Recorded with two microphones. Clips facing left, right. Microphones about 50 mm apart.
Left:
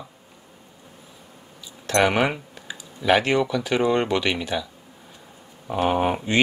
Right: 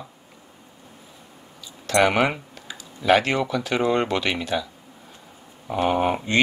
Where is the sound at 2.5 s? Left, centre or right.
Centre.